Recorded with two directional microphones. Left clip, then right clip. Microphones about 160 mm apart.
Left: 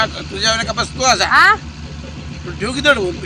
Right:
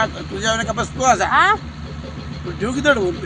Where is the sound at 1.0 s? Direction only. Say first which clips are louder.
Left 1 dB; 30° right (ahead or behind).